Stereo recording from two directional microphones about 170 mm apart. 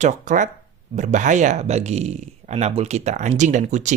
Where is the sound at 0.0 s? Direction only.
50° right (ahead or behind).